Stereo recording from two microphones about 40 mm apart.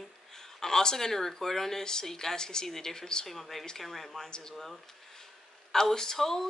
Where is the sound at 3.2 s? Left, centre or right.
Centre.